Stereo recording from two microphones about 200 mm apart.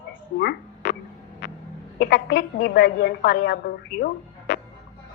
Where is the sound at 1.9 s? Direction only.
55° left (ahead or behind).